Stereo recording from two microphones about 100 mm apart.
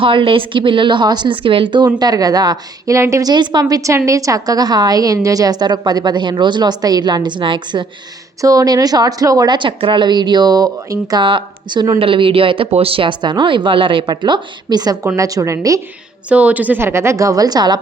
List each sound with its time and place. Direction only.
0.0 s speech: 60° right (ahead or behind)
2.0 s a woman's voice: 40° right (ahead or behind)
8.4 s a woman's voice: 35° right (ahead or behind)
9.6 s speech: 55° right (ahead or behind); by 11.2 s 35° right (ahead or behind)
11.2 s speech: 55° right (ahead or behind)
11.9 s speech: 65° right (ahead or behind); by 15.5 s 35° right (ahead or behind)
16.3 s a woman's voice: 15° right (ahead or behind); by 17.7 s 40° right (ahead or behind)